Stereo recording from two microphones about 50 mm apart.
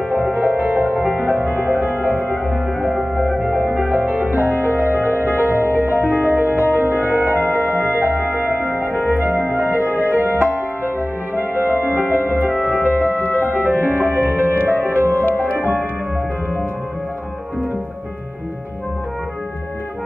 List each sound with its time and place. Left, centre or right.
0.1 s music: right
3.5 s music: right
7.3 s music: left
9.1 s music: right
13.2 s music: left
13.7 s music: right
15.2 s music: left
15.5 s music: right